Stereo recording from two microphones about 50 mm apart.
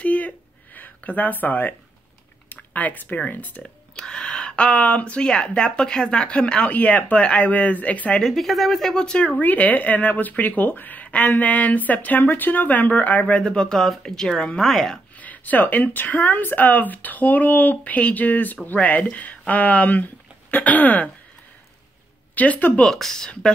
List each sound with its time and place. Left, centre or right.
0.0 s a sound: left
0.7 s speech: left
3.9 s speech: centre; by 8.2 s left
8.2 s speech: centre
9.0 s speech: left
13.4 s speech: centre
14.6 s speech: centre
15.1 s speech: left
22.3 s speech: left
22.9 s speech: centre